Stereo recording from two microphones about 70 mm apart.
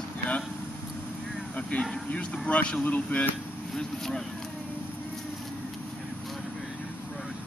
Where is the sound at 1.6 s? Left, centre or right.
Centre.